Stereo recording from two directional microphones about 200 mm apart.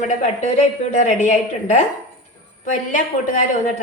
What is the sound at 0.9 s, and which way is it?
A woman's voice, 40° left (ahead or behind).